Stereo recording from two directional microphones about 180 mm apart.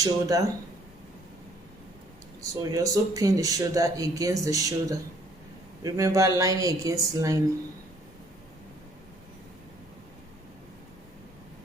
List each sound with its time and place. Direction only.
0.0 s speech: 20° right (ahead or behind)
2.4 s a woman's voice: 20° right (ahead or behind)